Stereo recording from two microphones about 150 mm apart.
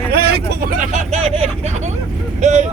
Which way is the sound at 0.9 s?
45° right (ahead or behind).